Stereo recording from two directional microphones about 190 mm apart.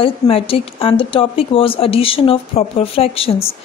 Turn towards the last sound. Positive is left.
turn(degrees=30)  # may be behind; listen again after turning